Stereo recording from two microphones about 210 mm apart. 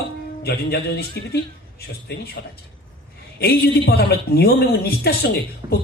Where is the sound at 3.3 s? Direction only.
50° left (ahead or behind).